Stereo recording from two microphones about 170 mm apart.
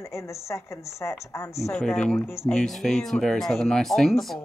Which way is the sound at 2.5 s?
Centre (ahead or behind).